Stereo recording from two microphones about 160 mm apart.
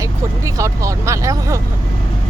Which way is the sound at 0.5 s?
20° right (ahead or behind).